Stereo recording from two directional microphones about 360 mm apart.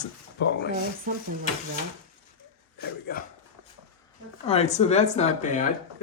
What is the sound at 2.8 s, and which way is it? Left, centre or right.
Speech, left.